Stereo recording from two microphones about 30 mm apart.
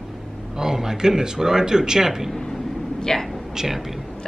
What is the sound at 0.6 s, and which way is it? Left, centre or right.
Speech, centre.